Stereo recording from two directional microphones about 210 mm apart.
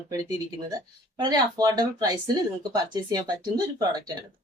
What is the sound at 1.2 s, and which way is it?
A woman's voice, 20° right (ahead or behind).